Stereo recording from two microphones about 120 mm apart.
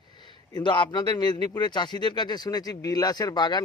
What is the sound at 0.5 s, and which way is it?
Speech, 40° left (ahead or behind).